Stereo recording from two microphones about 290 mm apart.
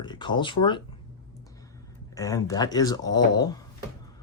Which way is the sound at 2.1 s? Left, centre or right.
Centre.